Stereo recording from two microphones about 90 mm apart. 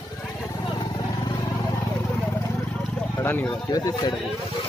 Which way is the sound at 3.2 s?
25° left (ahead or behind).